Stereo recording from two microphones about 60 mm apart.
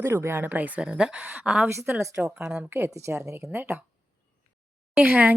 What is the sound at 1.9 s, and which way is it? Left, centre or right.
A woman's voice, right.